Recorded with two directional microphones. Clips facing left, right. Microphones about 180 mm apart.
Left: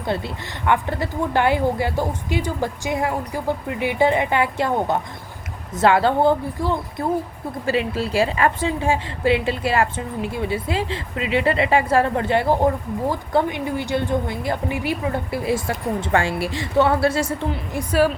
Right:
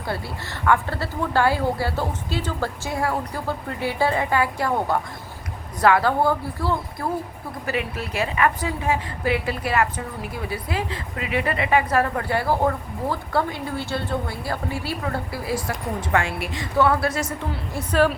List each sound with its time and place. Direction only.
0.1 s a woman's voice: 20° left (ahead or behind)
17.5 s a woman's voice: 10° left (ahead or behind)